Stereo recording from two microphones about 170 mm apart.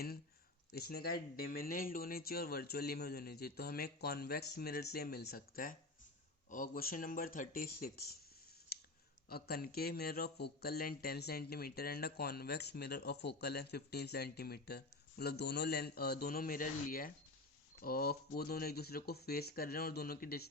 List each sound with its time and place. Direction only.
0.7 s speech: 70° left (ahead or behind)
9.3 s speech: 65° left (ahead or behind)